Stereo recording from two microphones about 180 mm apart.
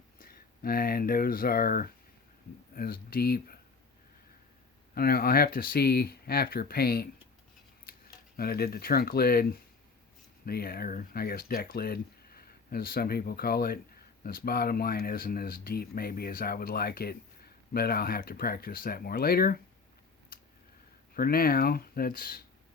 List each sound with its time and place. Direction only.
0.2 s speech: 55° left (ahead or behind)
4.9 s speech: 55° left (ahead or behind)
21.2 s speech: 55° left (ahead or behind)